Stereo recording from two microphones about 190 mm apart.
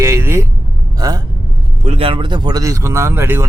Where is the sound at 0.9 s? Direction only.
20° right (ahead or behind).